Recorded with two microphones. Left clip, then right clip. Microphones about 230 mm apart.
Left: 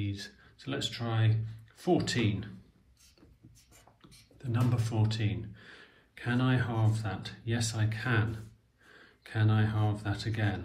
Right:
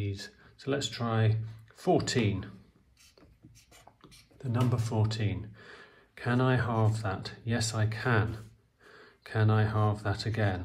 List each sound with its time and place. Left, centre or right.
0.0 s speech: right
4.7 s speech: right